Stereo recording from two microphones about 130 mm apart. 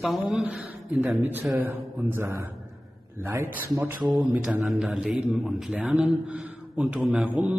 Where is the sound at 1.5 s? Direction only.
15° right (ahead or behind).